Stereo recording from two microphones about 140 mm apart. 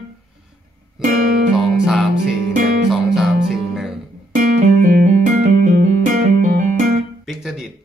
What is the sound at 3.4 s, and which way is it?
Music, centre (ahead or behind).